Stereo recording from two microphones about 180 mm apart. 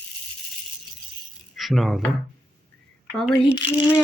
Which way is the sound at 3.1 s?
5° left (ahead or behind).